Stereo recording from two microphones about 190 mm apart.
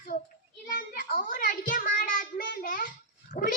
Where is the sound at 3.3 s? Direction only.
50° left (ahead or behind).